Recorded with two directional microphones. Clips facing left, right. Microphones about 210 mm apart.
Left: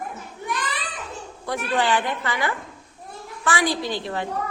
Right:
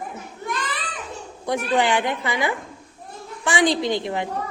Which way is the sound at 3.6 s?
20° right (ahead or behind).